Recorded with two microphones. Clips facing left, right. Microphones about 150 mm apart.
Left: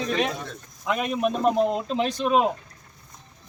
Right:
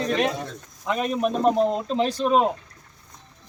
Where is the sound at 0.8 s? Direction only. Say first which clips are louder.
Right 1 dB; 5° left (ahead or behind).